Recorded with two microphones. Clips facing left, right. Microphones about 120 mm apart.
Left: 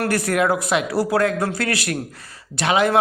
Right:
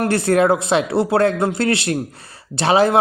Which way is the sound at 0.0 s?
25° right (ahead or behind).